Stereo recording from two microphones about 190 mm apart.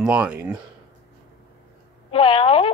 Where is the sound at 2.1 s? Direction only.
30° left (ahead or behind).